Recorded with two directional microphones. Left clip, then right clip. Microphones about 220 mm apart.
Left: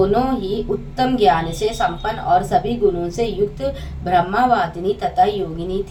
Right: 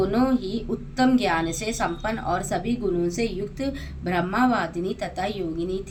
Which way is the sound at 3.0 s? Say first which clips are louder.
Left 7 dB; 40° right (ahead or behind).